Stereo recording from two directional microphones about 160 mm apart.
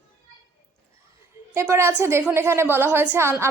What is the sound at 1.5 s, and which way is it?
A woman's voice, 15° right (ahead or behind).